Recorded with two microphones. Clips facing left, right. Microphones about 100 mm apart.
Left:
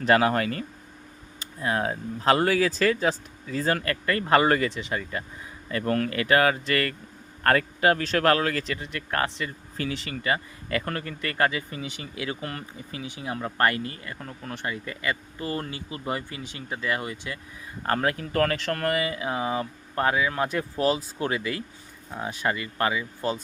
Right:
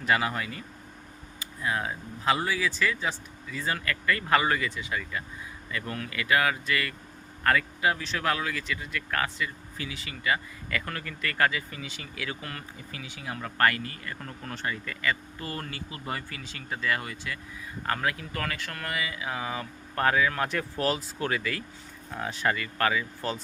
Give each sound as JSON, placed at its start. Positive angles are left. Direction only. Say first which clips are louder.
{"t": 0.1, "sound": "speech", "louder": "left 6 dB", "side_deg": 55}
{"t": 1.6, "sound": "speech", "louder": "left 4 dB", "side_deg": 45}
{"t": 8.8, "sound": "speech", "louder": "left 3 dB", "side_deg": 30}
{"t": 14.2, "sound": "speech", "louder": "left 2 dB", "side_deg": 0}
{"t": 14.5, "sound": "speech", "louder": "left 1 dB", "side_deg": 15}
{"t": 17.8, "sound": "speech", "louder": "left 4 dB", "side_deg": 40}